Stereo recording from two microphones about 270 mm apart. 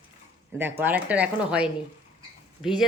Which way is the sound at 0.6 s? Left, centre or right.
Centre.